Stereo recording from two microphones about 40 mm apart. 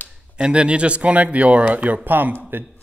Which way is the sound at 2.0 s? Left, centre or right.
Right.